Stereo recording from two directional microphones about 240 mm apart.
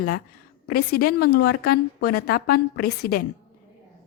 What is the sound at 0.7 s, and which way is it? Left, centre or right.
A woman's voice, left.